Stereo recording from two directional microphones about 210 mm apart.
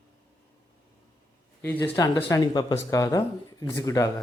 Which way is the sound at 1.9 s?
15° left (ahead or behind).